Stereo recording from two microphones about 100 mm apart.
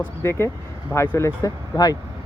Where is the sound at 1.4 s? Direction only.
35° left (ahead or behind).